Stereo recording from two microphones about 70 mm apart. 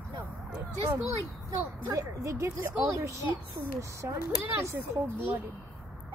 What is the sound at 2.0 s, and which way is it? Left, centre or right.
Speech, right.